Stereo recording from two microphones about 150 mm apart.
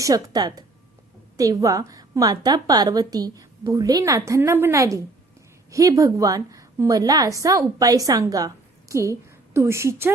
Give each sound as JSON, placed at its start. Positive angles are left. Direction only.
{"t": 0.0, "sound": "a woman's voice", "side_deg": -25}